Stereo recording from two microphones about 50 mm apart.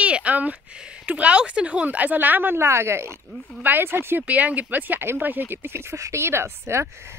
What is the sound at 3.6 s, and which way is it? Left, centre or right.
Speech, right.